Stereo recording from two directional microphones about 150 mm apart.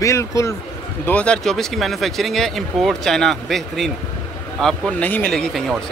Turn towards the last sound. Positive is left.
turn(degrees=0)  # may be behind; listen again after turning